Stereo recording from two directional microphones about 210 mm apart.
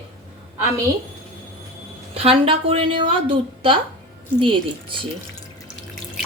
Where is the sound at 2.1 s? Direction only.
30° right (ahead or behind).